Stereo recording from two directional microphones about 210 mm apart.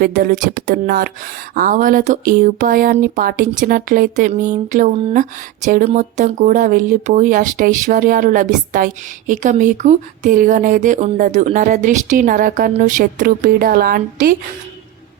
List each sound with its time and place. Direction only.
0.0 s speech: 40° right (ahead or behind)